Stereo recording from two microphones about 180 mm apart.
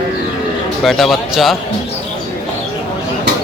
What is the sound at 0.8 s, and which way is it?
Speech, centre (ahead or behind).